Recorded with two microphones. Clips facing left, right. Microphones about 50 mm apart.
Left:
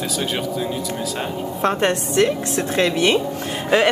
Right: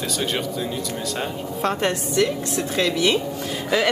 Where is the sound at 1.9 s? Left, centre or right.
Left.